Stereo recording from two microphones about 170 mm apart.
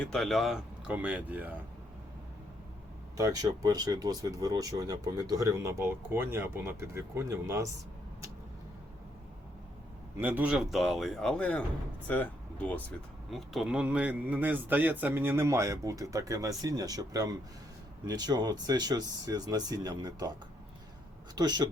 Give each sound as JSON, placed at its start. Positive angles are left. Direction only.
{"t": 0.0, "sound": "speech", "side_deg": 0}
{"t": 3.2, "sound": "speech", "side_deg": -20}
{"t": 10.2, "sound": "a man's voice", "side_deg": -10}
{"t": 21.3, "sound": "speech", "side_deg": -25}